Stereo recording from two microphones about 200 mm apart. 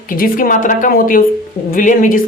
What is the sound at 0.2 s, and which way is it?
Speech, 45° left (ahead or behind).